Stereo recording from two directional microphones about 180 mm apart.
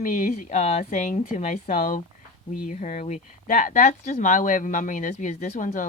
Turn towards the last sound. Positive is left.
turn(degrees=45)  # may be behind; listen again after turning